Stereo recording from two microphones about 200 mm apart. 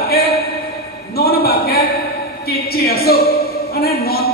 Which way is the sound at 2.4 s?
50° left (ahead or behind).